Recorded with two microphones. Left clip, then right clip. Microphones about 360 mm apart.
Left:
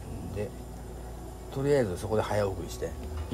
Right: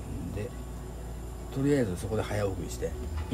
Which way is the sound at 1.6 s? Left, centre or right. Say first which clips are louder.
Left 2 dB; centre.